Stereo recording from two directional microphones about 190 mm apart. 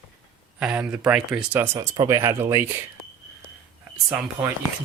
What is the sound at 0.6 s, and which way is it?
Speech, 5° right (ahead or behind).